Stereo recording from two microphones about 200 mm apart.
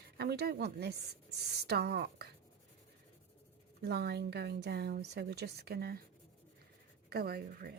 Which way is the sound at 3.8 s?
55° right (ahead or behind).